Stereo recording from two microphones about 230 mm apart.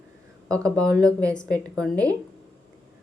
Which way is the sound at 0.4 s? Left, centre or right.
Centre.